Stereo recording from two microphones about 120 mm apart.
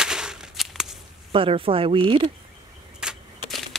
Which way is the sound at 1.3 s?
45° right (ahead or behind).